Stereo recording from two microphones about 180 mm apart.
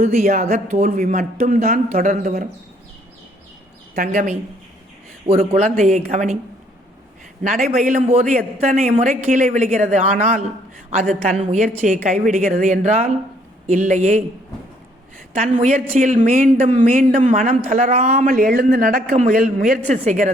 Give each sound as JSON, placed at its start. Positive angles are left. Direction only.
{"t": 0.0, "sound": "a woman's voice", "side_deg": -45}
{"t": 3.9, "sound": "a woman's voice", "side_deg": -50}
{"t": 5.3, "sound": "a woman's voice", "side_deg": -30}
{"t": 5.8, "sound": "a woman's voice", "side_deg": -45}
{"t": 7.4, "sound": "a woman's voice", "side_deg": -50}
{"t": 15.4, "sound": "a woman's voice", "side_deg": -40}
{"t": 19.1, "sound": "a woman's voice", "side_deg": -45}